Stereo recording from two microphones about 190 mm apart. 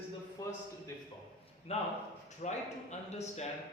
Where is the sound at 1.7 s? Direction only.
35° left (ahead or behind).